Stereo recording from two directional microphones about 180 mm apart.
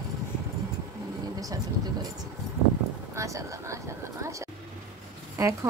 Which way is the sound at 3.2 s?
15° right (ahead or behind).